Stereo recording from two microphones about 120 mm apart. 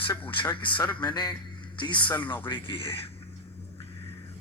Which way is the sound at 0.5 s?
45° left (ahead or behind).